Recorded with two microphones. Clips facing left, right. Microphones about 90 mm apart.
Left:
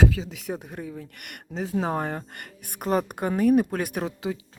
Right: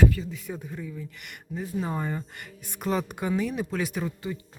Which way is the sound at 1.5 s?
85° left.